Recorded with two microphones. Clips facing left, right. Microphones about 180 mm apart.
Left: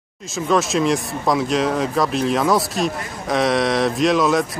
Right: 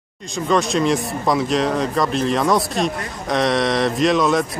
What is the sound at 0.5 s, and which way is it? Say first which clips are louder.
Speech: even; centre (ahead or behind).